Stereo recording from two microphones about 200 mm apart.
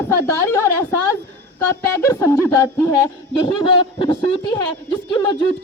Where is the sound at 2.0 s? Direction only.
15° left (ahead or behind).